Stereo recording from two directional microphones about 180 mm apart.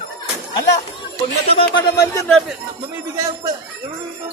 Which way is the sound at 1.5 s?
30° left (ahead or behind).